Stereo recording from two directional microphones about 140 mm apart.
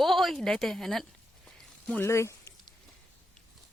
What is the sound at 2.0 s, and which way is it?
Speech, 20° left (ahead or behind).